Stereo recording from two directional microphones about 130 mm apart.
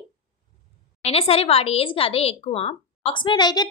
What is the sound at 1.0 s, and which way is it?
A woman's voice, 50° left (ahead or behind).